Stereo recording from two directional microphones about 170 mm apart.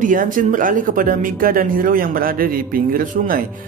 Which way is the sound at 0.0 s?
50° right (ahead or behind).